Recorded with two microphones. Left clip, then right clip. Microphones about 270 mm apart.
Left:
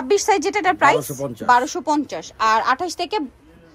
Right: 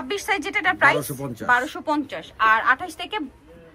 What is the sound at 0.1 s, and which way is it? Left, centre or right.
A woman's voice, left.